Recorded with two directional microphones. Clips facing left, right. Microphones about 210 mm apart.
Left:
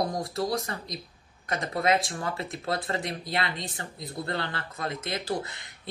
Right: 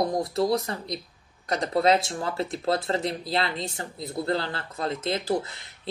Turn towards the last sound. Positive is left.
turn(degrees=-25)  # may be behind; listen again after turning